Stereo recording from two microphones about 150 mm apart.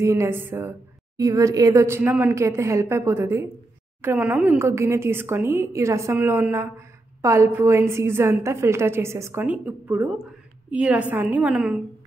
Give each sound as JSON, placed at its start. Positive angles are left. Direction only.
{"t": 0.0, "sound": "a woman's voice", "side_deg": -20}